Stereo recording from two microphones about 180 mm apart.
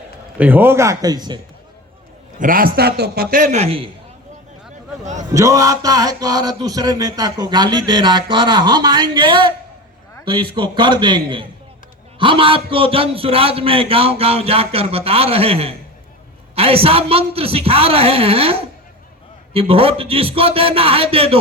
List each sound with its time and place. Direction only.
0.3 s a man's voice: 10° right (ahead or behind)
2.4 s a man's voice: 50° right (ahead or behind); by 3.8 s 35° right (ahead or behind)
5.3 s a sound: 15° right (ahead or behind)
12.2 s a man's voice: 30° right (ahead or behind)